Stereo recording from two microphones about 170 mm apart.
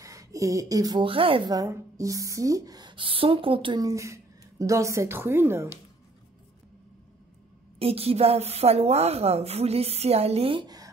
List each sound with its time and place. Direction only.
0.0 s a woman's voice: 20° right (ahead or behind)
7.8 s a woman's voice: 35° right (ahead or behind)